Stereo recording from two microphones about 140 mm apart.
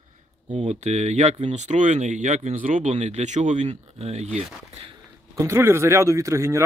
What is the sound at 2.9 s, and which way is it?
Speech, 55° right (ahead or behind).